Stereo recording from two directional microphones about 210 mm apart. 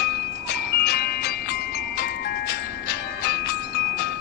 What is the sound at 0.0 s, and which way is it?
Music, 50° left (ahead or behind).